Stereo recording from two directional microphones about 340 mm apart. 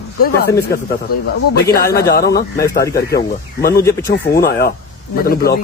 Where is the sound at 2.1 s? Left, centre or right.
Left.